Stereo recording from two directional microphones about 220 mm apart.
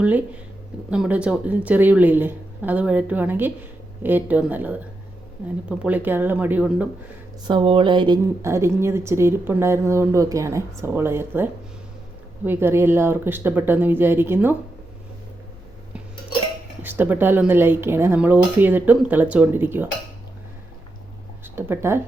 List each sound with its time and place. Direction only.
0.9 s a woman's voice: 5° right (ahead or behind)
7.4 s a woman's voice: 20° right (ahead or behind)
12.5 s a woman's voice: 10° right (ahead or behind)
16.8 s a woman's voice: 10° right (ahead or behind)
21.4 s speech: 10° right (ahead or behind)